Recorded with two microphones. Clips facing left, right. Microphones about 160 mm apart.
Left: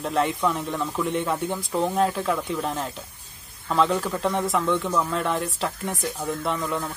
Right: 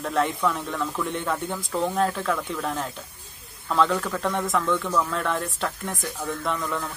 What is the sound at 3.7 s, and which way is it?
Speech, 5° left (ahead or behind).